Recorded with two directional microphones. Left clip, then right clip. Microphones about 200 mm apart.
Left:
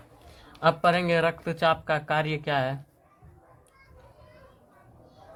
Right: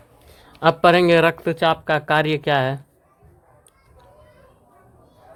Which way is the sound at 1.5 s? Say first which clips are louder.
Right 5 dB; 35° right (ahead or behind).